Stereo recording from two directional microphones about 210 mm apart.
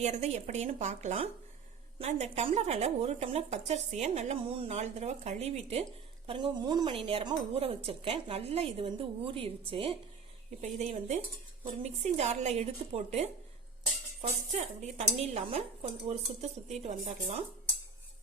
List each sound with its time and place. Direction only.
0.0 s a woman's voice: 30° right (ahead or behind)